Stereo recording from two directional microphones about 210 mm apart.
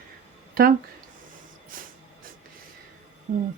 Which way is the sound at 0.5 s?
45° right (ahead or behind).